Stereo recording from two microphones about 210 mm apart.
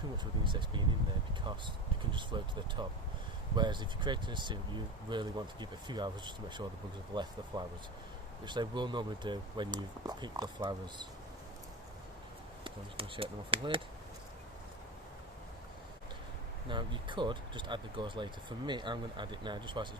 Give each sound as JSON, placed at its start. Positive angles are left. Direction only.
{"t": 0.4, "sound": "speech", "side_deg": -20}
{"t": 12.6, "sound": "speech", "side_deg": -25}
{"t": 16.6, "sound": "speech", "side_deg": -25}